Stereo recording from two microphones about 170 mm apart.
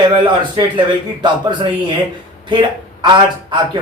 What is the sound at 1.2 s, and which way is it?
A man's voice, 25° right (ahead or behind).